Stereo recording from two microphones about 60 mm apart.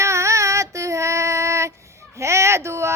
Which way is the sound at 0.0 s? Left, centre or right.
Right.